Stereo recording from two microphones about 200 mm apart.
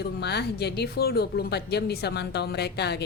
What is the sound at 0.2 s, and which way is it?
A woman's voice, 55° left (ahead or behind).